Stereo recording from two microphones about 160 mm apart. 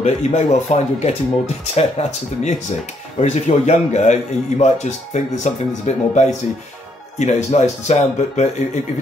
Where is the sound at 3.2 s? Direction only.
45° left (ahead or behind).